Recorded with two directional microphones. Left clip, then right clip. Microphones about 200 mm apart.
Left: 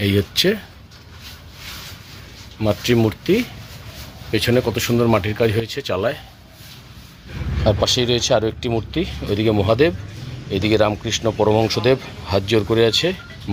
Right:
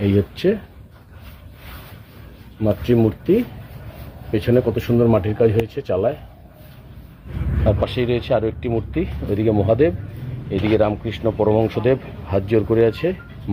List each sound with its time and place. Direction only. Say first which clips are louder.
0.0 s speech: left 1 dB; 10° left (ahead or behind)
2.6 s speech: even; 10° left (ahead or behind)
7.6 s speech: left 3 dB; 20° left (ahead or behind)